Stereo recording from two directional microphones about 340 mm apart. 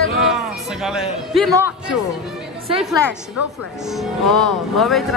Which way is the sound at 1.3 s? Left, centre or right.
Centre.